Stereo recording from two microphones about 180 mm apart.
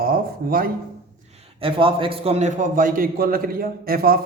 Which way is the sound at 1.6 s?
30° right (ahead or behind).